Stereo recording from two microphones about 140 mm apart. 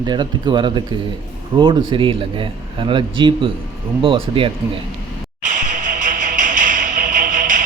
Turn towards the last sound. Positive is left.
turn(degrees=-70)  # may be behind; listen again after turning